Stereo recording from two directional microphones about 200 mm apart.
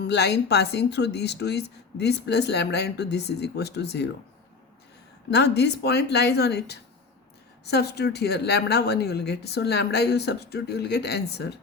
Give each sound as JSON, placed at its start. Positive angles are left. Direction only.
{"t": 0.0, "sound": "speech", "side_deg": 60}
{"t": 5.3, "sound": "speech", "side_deg": 55}